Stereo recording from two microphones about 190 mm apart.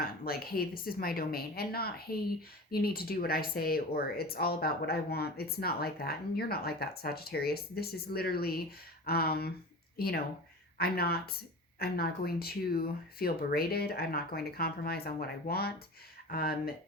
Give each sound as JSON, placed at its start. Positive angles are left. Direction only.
{"t": 0.0, "sound": "a woman's voice", "side_deg": 55}